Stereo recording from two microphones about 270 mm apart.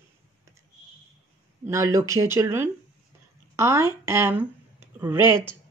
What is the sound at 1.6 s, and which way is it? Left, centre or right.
Speech, centre.